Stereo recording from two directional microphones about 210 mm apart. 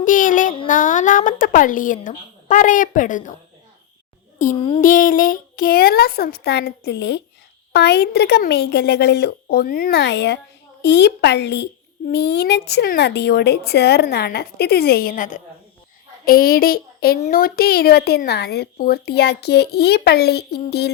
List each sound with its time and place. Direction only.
0.0 s a sound: 40° left (ahead or behind)
0.7 s speech: 40° left (ahead or behind)
4.8 s a woman's voice: 40° left (ahead or behind)